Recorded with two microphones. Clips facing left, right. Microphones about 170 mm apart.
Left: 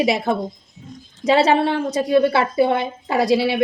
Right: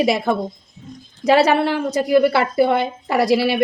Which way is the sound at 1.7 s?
25° left (ahead or behind).